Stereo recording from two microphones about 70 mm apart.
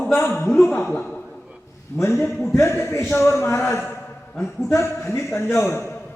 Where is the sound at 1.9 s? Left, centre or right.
Left.